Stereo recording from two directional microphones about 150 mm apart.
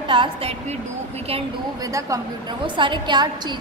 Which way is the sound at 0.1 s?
35° right (ahead or behind).